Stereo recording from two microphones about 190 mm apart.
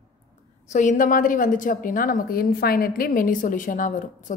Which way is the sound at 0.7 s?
40° left (ahead or behind).